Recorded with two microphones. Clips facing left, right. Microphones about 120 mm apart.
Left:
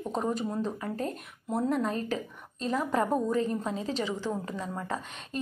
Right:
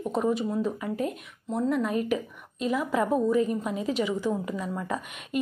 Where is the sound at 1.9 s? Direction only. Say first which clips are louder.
Right 5 dB; 15° right (ahead or behind).